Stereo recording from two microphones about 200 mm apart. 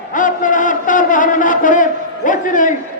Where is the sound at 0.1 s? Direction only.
40° left (ahead or behind).